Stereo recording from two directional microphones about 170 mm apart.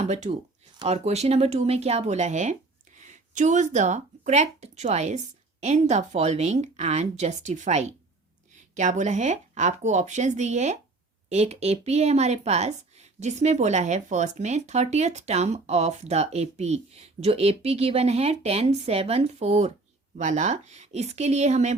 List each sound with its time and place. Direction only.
0.0 s a woman's voice: 40° right (ahead or behind)